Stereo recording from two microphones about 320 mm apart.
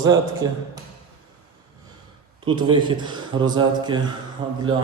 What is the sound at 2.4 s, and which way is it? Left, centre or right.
Speech, centre.